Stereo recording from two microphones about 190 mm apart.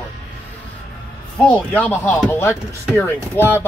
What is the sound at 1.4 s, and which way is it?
Speech, 5° left (ahead or behind).